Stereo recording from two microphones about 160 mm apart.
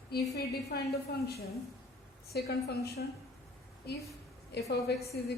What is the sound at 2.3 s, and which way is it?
A woman's voice, 80° left.